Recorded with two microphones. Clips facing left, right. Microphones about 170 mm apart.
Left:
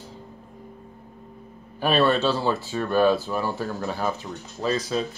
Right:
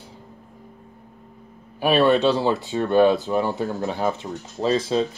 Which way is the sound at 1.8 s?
15° right (ahead or behind).